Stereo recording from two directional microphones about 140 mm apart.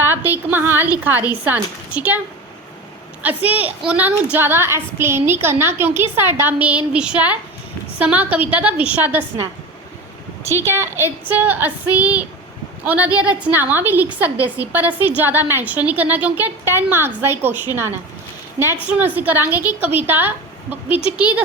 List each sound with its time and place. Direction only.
0.0 s a sound: 15° right (ahead or behind)
1.5 s a woman's voice: 10° right (ahead or behind)
3.2 s a woman's voice: 10° right (ahead or behind)
10.6 s a woman's voice: 15° right (ahead or behind)